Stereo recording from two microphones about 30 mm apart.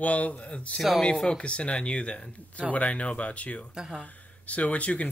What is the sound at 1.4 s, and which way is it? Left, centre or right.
Speech, left.